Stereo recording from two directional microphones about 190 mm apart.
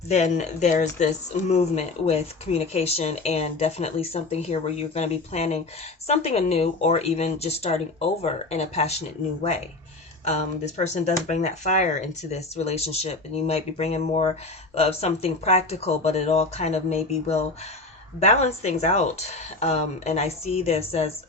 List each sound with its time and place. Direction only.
0.1 s speech: 40° left (ahead or behind)